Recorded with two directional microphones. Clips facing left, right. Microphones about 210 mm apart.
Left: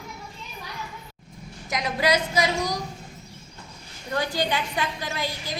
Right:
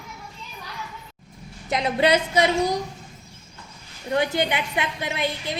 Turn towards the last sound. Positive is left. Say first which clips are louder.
# right 4 dB
turn(degrees=-25)  # may be behind; listen again after turning